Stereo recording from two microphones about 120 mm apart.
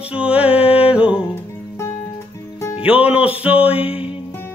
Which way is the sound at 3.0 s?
10° right (ahead or behind).